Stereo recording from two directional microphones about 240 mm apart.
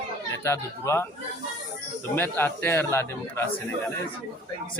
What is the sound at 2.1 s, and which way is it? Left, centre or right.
A man's voice, centre.